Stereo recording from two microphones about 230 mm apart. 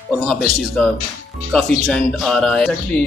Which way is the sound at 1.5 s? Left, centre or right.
Centre.